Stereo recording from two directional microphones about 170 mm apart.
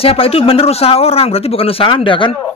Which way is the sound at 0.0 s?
35° left (ahead or behind).